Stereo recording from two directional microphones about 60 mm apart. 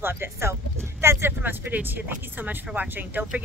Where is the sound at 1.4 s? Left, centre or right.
Right.